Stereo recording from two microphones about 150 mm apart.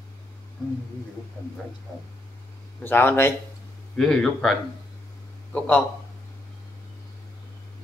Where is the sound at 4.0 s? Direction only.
5° left (ahead or behind).